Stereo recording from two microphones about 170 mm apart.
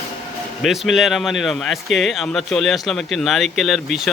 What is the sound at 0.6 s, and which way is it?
Speech, centre (ahead or behind).